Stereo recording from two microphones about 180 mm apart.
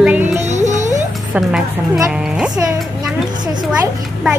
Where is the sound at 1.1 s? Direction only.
Centre (ahead or behind).